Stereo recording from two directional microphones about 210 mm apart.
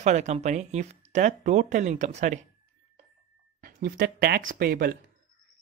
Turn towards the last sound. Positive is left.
turn(degrees=-45)  # may be behind; listen again after turning